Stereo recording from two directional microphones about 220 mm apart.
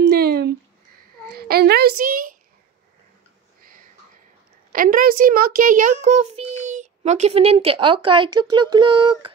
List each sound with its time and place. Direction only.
0.0 s a sound: 45° right (ahead or behind)
1.2 s a child's voice: 45° right (ahead or behind)
4.7 s a child's voice: 40° right (ahead or behind); by 9.3 s 20° right (ahead or behind)